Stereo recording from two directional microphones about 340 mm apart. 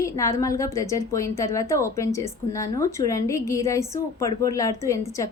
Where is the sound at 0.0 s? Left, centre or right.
Centre.